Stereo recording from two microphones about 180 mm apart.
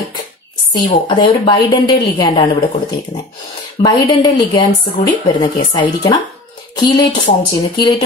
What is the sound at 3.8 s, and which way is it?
A woman's voice, 25° left (ahead or behind).